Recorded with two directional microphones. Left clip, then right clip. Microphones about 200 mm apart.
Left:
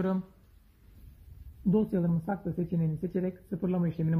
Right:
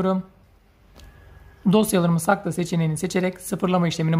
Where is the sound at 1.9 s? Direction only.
25° right (ahead or behind).